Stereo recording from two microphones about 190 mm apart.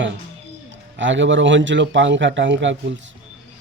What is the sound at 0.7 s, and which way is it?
A man's voice, 75° right (ahead or behind).